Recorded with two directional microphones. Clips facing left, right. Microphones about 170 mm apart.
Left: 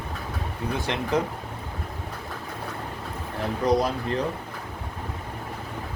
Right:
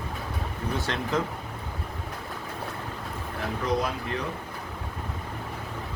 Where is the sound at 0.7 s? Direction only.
15° left (ahead or behind).